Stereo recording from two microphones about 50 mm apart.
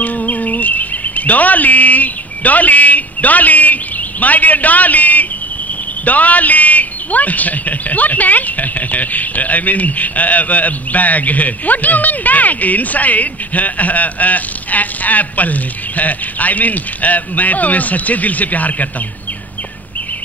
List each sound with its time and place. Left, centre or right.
0.0 s chirp: left
6.0 s a man's voice: left